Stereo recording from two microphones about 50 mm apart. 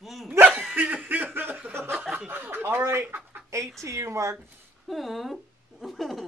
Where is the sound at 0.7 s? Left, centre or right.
Right.